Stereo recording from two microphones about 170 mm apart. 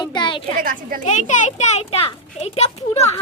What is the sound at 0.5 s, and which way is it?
Speech, 55° right (ahead or behind).